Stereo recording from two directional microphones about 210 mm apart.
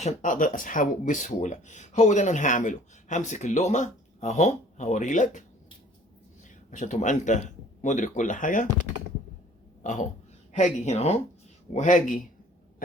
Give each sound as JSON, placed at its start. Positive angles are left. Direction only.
{"t": 0.0, "sound": "speech", "side_deg": 35}
{"t": 6.7, "sound": "speech", "side_deg": 35}
{"t": 9.8, "sound": "speech", "side_deg": 35}